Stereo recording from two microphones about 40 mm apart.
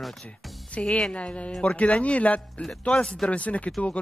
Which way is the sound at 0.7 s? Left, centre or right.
Left.